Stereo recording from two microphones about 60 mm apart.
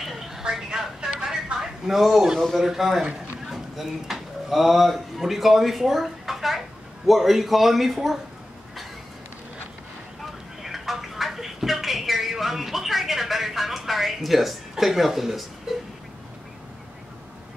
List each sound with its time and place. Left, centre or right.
0.0 s a sound: centre
3.4 s a man's voice: centre
10.6 s speech: centre